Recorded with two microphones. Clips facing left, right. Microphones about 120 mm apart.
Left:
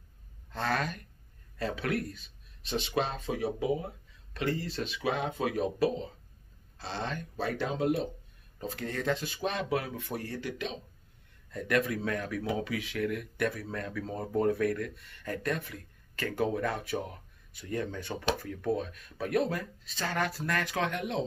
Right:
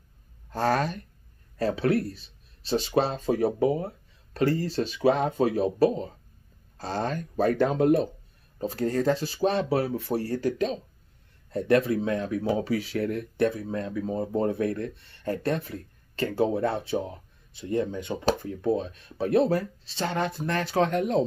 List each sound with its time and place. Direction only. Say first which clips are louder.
0.5 s speech: right 7 dB; 40° right (ahead or behind)
8.5 s speech: right 9 dB; 35° right (ahead or behind)